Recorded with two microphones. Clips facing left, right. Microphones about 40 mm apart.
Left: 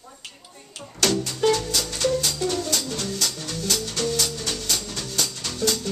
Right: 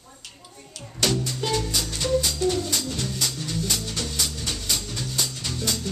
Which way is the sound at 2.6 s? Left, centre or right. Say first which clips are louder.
Left 1 dB; centre.